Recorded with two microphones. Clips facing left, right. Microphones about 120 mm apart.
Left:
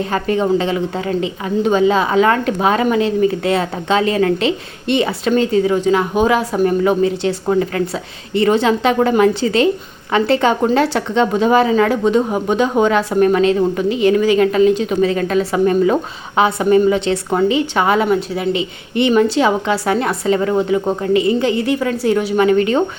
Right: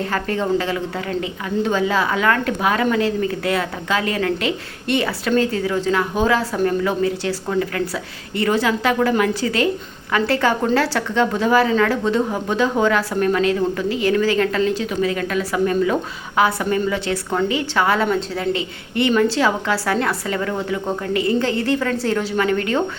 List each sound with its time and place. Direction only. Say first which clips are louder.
0.0 s a woman's voice: left 5 dB; 20° left (ahead or behind)